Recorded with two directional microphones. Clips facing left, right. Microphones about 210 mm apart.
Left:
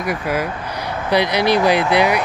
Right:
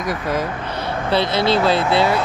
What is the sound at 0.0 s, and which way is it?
Speech, 10° left (ahead or behind).